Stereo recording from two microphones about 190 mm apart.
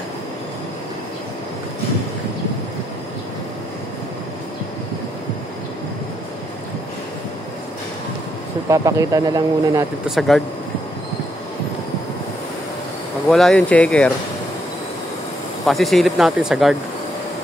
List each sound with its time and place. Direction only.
8.6 s speech: 15° right (ahead or behind)
10.0 s speech: centre (ahead or behind)
13.3 s speech: 5° left (ahead or behind)
15.6 s speech: centre (ahead or behind)